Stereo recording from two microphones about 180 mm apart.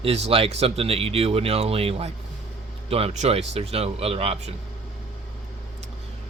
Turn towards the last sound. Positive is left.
turn(degrees=-35)  # may be behind; listen again after turning